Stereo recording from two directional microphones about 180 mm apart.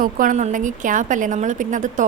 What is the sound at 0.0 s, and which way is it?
A woman's voice, 50° right (ahead or behind).